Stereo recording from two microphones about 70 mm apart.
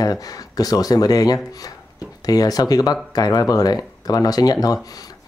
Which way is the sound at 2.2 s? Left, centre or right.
Left.